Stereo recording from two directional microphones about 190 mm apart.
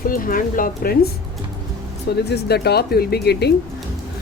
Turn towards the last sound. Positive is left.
turn(degrees=55)  # may be behind; listen again after turning